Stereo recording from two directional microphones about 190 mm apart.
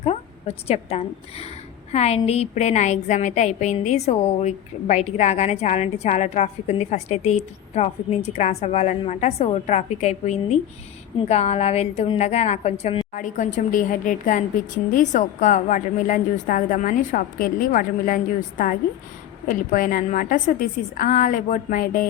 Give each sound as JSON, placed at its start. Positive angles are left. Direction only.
{"t": 0.0, "sound": "a woman's voice", "side_deg": 35}